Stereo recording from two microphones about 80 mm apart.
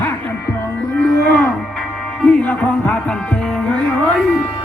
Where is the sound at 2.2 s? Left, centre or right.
Centre.